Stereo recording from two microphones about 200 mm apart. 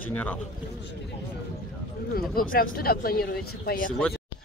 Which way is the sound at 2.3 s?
45° left (ahead or behind).